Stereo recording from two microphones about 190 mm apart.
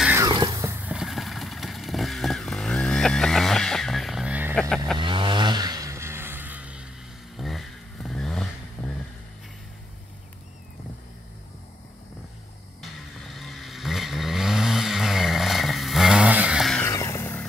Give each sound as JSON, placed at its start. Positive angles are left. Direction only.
{"t": 0.0, "sound": "a sound", "side_deg": -10}
{"t": 0.3, "sound": "vehicle", "side_deg": -20}
{"t": 4.6, "sound": "speech", "side_deg": 5}
{"t": 4.9, "sound": "vehicle", "side_deg": -25}
{"t": 13.3, "sound": "vehicle", "side_deg": 0}
{"t": 16.8, "sound": "vehicle", "side_deg": 15}